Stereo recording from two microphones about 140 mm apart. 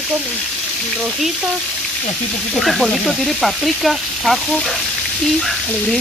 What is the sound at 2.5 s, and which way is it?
Sizzle, centre (ahead or behind).